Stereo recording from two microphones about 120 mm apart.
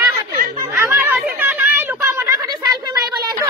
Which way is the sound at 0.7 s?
20° right (ahead or behind).